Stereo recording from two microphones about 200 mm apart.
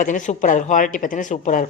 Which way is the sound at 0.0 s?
40° left (ahead or behind).